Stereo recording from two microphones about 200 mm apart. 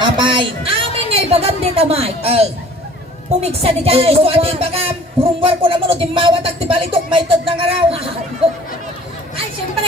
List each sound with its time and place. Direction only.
0.0 s speech: 25° right (ahead or behind)